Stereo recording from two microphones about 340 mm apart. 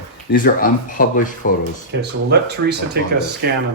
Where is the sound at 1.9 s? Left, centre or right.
Right.